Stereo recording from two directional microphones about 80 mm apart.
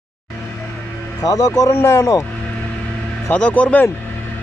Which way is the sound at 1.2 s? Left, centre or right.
Left.